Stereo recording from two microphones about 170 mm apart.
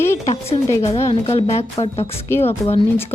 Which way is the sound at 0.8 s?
40° left (ahead or behind).